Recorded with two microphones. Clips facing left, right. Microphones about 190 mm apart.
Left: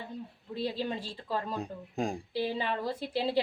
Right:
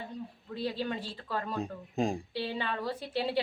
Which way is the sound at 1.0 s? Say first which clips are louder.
Left 1 dB; 10° left (ahead or behind).